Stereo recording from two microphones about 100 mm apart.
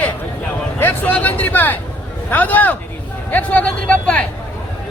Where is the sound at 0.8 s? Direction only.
20° left (ahead or behind).